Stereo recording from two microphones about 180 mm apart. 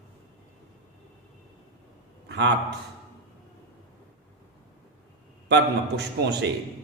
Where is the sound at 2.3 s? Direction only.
70° right (ahead or behind).